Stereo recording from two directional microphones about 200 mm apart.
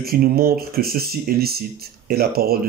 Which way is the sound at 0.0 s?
50° right (ahead or behind).